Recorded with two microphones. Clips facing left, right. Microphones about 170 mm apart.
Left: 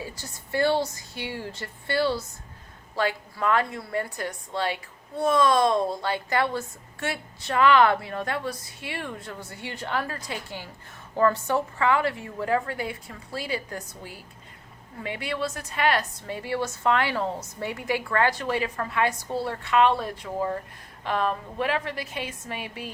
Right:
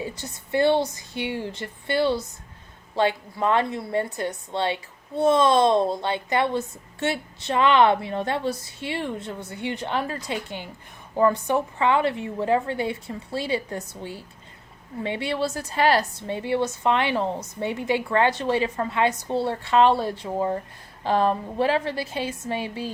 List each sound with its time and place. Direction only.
0.2 s a woman's voice: 20° right (ahead or behind)